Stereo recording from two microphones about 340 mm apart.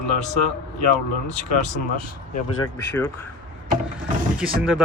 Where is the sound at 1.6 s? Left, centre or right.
Left.